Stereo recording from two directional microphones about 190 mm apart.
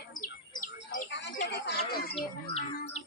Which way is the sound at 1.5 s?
60° left (ahead or behind).